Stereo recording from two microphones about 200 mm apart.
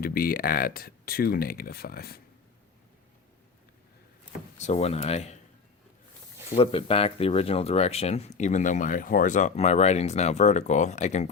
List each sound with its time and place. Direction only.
0.0 s speech: 45° left (ahead or behind)
4.5 s speech: 35° left (ahead or behind)
6.5 s speech: 30° left (ahead or behind)